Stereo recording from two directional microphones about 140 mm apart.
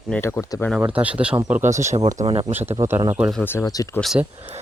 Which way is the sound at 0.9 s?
10° right (ahead or behind).